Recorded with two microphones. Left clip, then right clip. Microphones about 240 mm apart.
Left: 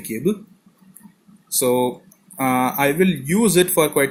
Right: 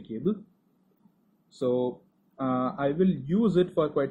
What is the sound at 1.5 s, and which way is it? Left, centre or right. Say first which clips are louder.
Speech: left 9 dB; left.